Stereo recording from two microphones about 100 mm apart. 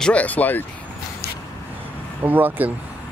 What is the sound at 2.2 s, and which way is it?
Speech, 20° right (ahead or behind).